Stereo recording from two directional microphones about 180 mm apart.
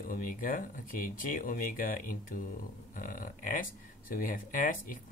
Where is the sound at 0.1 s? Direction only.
50° left (ahead or behind).